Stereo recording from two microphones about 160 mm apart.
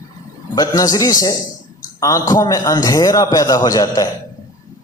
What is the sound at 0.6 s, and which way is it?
A man's voice, 25° left (ahead or behind).